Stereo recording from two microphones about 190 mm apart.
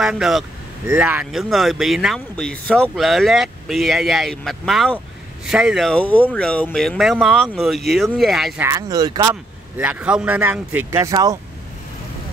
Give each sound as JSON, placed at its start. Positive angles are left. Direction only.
{"t": 0.0, "sound": "speech", "side_deg": 0}
{"t": 8.6, "sound": "speech", "side_deg": -20}
{"t": 9.3, "sound": "speech", "side_deg": -10}